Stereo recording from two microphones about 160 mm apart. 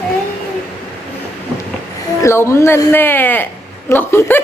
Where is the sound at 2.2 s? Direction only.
15° left (ahead or behind).